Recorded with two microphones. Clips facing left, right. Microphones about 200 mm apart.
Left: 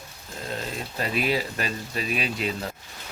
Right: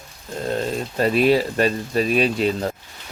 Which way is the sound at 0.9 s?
40° right (ahead or behind).